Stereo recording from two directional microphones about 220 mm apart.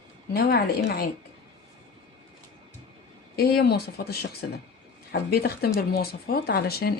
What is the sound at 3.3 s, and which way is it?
Speech, 45° left (ahead or behind).